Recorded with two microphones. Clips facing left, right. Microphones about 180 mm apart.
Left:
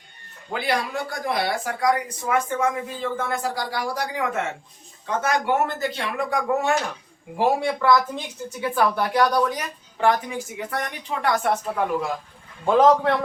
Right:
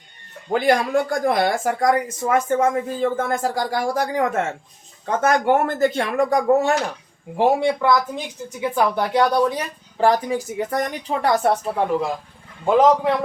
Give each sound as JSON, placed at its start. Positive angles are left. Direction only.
{"t": 0.5, "sound": "speech", "side_deg": -45}
{"t": 7.3, "sound": "a woman's voice", "side_deg": -20}
{"t": 12.6, "sound": "a man's voice", "side_deg": -10}